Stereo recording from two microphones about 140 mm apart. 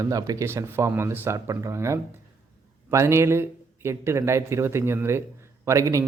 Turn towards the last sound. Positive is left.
turn(degrees=-20)  # may be behind; listen again after turning